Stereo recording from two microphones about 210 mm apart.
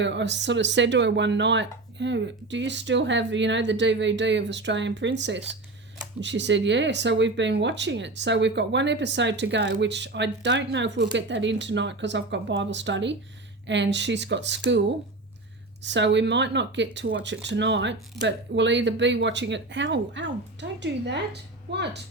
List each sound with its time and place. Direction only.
0.0 s speech: 60° right (ahead or behind)
15.8 s speech: 55° right (ahead or behind)